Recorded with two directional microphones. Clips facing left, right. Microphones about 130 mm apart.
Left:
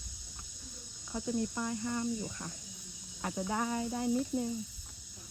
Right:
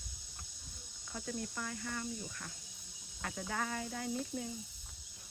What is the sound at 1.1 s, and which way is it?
Speech, 20° left (ahead or behind).